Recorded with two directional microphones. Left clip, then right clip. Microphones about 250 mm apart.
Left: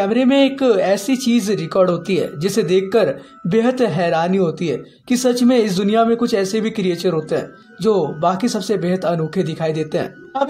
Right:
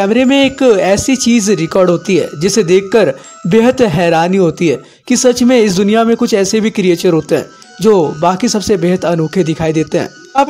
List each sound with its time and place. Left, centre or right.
0.0 s speech: right